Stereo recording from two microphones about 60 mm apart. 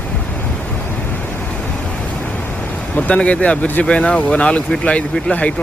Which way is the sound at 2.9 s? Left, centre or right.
Left.